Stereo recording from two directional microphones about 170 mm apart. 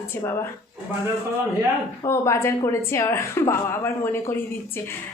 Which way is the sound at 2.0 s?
15° left (ahead or behind).